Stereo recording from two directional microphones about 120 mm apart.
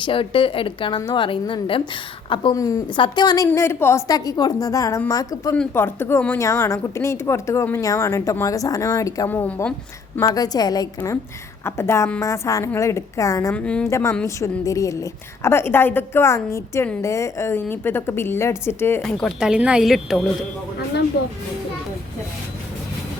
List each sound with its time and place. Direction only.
0.0 s a woman's voice: 50° left (ahead or behind)
2.6 s a woman's voice: 30° left (ahead or behind)
5.7 s a woman's voice: 20° left (ahead or behind)
9.3 s a woman's voice: 15° left (ahead or behind)
10.2 s a woman's voice: 30° left (ahead or behind)
13.5 s a woman's voice: 10° left (ahead or behind)
13.9 s a woman's voice: 25° left (ahead or behind)
19.0 s a woman's voice: 5° left (ahead or behind)
19.4 s a woman's voice: 10° right (ahead or behind)